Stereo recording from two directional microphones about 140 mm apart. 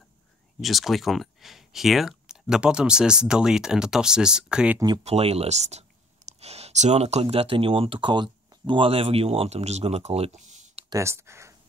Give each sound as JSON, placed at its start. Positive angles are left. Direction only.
{"t": 0.6, "sound": "speech", "side_deg": 0}
{"t": 4.7, "sound": "speech", "side_deg": -30}
{"t": 5.0, "sound": "speech", "side_deg": -45}
{"t": 10.9, "sound": "speech", "side_deg": -20}